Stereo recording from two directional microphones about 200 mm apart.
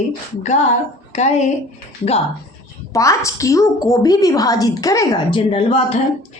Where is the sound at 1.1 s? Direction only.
35° left (ahead or behind).